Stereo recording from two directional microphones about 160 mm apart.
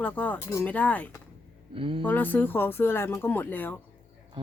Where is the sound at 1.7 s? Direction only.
35° right (ahead or behind).